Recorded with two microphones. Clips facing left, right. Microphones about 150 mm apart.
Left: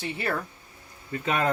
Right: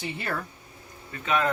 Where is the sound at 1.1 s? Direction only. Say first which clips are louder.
Even; 35° left (ahead or behind).